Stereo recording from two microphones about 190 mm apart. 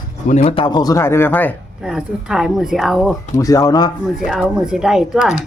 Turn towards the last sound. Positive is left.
turn(degrees=-5)  # may be behind; listen again after turning